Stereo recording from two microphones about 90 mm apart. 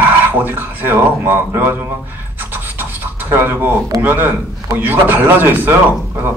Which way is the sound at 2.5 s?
20° right (ahead or behind).